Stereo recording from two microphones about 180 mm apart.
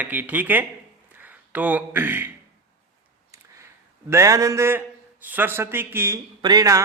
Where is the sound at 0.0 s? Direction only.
10° right (ahead or behind).